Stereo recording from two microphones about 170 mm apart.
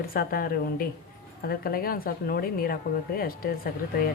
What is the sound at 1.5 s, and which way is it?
Speech, 60° left (ahead or behind).